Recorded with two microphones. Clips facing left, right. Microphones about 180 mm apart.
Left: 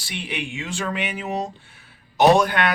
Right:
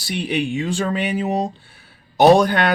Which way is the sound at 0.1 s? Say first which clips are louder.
Right 9 dB; 40° right (ahead or behind).